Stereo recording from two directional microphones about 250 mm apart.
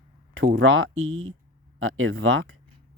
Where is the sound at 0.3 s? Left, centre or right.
Right.